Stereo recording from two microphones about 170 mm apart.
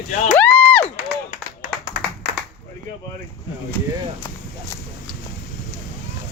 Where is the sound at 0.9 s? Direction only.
50° left (ahead or behind).